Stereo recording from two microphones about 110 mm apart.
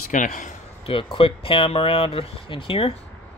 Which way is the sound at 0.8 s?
55° left (ahead or behind).